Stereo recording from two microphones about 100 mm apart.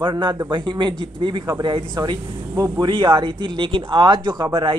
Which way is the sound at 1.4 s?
40° right (ahead or behind).